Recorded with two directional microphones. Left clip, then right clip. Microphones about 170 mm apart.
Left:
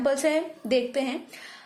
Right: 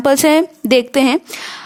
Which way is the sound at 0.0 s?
60° right (ahead or behind).